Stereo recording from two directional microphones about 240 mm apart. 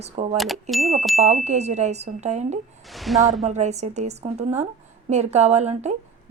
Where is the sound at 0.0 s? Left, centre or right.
Right.